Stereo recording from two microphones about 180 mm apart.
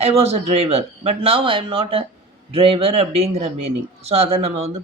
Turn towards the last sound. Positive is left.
turn(degrees=-35)  # may be behind; listen again after turning